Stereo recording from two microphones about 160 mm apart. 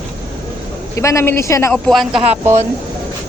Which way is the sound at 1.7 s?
Centre (ahead or behind).